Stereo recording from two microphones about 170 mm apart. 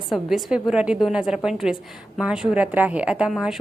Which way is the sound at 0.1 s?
Centre (ahead or behind).